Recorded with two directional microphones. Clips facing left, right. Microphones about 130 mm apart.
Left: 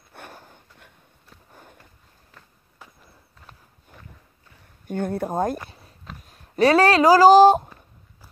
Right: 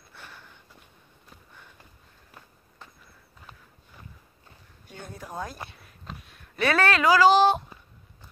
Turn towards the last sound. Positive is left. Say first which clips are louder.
# left 7 dB
turn(degrees=40)  # may be behind; listen again after turning